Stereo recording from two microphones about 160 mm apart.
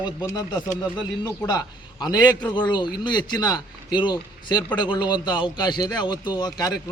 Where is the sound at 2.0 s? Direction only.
25° left (ahead or behind).